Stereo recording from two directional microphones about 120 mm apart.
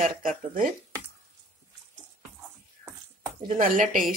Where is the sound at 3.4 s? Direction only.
90° right.